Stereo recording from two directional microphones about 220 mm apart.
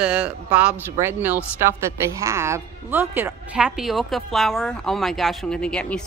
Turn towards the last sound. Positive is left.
turn(degrees=5)  # may be behind; listen again after turning